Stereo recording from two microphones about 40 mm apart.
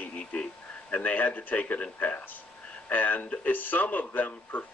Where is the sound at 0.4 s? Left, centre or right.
Left.